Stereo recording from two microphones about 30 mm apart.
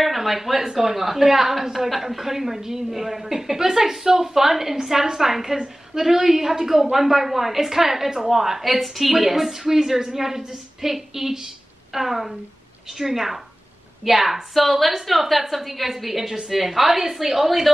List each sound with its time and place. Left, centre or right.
0.0 s a woman's voice: centre
8.1 s a woman's voice: right
8.4 s a woman's voice: centre